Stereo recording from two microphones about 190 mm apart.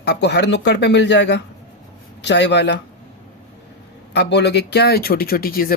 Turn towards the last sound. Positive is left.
turn(degrees=50)  # may be behind; listen again after turning